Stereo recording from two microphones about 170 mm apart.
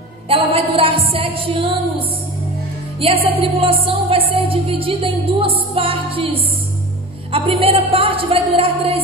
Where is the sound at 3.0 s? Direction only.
35° right (ahead or behind).